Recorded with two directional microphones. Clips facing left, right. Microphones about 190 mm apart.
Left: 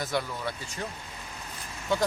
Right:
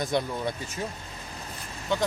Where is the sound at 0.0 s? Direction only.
20° right (ahead or behind).